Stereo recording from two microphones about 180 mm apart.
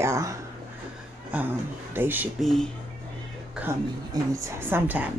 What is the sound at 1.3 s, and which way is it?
Speech, 10° right (ahead or behind).